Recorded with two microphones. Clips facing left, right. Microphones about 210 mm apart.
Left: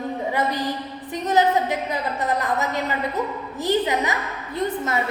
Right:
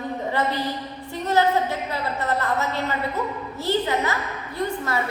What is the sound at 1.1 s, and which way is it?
A woman's voice, 15° left (ahead or behind).